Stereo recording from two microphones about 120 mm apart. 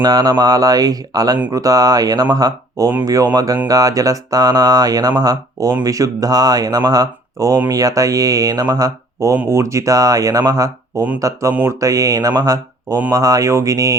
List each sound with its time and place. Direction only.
0.0 s speech: 35° right (ahead or behind)